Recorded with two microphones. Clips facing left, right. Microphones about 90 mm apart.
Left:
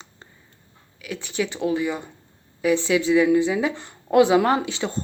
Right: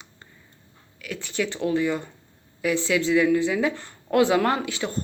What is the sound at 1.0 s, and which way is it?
Speech, 15° left (ahead or behind).